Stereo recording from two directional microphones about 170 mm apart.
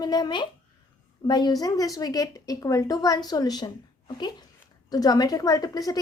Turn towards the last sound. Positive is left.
turn(degrees=20)  # may be behind; listen again after turning